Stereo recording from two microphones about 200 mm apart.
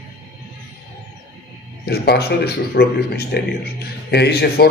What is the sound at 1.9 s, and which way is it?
A man's voice, 55° left (ahead or behind).